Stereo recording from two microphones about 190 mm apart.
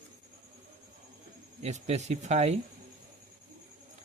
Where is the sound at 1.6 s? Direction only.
35° right (ahead or behind).